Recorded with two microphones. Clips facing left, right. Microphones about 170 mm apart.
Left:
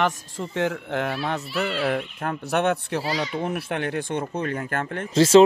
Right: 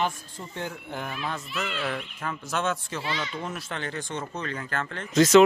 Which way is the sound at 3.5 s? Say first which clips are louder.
Left 7 dB; 60° left (ahead or behind).